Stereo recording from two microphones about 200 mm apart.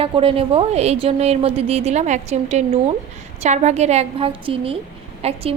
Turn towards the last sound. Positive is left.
turn(degrees=-30)  # may be behind; listen again after turning